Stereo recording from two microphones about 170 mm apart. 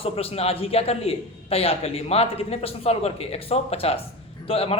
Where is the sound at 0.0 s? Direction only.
35° left (ahead or behind).